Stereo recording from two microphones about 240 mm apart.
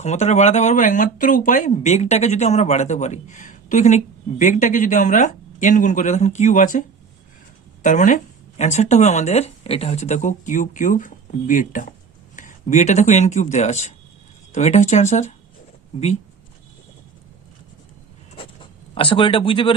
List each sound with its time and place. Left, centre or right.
0.0 s speech: left
18.3 s writing: left